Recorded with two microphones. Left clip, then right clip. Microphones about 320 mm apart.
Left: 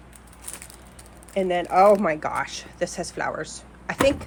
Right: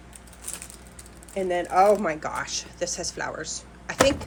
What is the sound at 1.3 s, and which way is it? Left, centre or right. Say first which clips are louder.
A woman's voice: left 2 dB; left.